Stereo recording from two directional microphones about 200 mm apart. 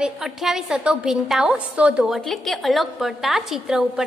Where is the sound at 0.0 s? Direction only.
Centre (ahead or behind).